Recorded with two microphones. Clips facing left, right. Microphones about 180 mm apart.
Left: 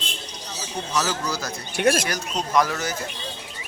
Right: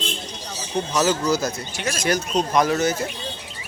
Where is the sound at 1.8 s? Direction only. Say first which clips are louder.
Left 11 dB; 55° left (ahead or behind).